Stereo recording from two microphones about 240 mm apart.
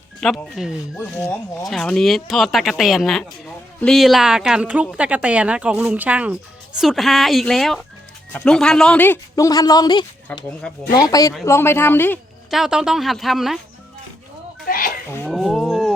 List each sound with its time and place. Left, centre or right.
0.2 s a woman's voice: centre
11.1 s a woman's voice: centre
14.7 s speech: left
15.1 s speech: centre